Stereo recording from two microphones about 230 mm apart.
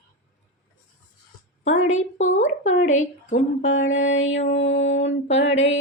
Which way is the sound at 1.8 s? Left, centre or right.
Left.